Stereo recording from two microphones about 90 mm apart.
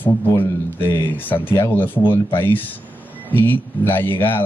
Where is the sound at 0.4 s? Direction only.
25° left (ahead or behind).